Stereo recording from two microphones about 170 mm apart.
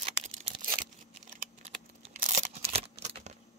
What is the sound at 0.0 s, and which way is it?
Tearing, 40° right (ahead or behind).